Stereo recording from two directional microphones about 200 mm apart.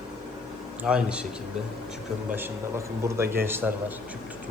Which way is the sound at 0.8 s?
5° right (ahead or behind).